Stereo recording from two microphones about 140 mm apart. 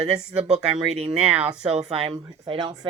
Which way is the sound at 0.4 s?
50° right (ahead or behind).